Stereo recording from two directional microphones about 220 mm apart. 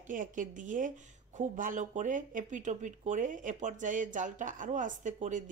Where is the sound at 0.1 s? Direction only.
35° right (ahead or behind).